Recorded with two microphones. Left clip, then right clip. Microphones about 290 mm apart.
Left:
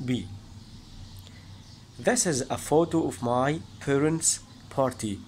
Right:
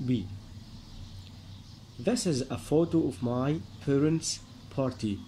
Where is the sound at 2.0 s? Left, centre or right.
Left.